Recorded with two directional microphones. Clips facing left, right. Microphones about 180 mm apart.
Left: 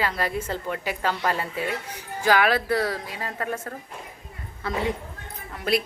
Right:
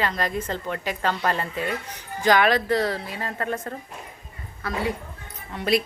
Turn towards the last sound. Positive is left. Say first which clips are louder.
# right 2 dB
turn(degrees=0)  # may be behind; listen again after turning